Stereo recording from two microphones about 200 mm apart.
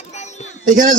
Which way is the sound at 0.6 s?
40° right (ahead or behind).